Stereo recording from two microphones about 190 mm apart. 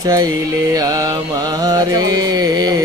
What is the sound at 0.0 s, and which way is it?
Mantra, 20° right (ahead or behind).